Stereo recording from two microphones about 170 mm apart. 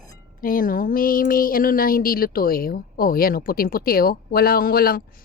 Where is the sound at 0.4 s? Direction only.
55° left (ahead or behind).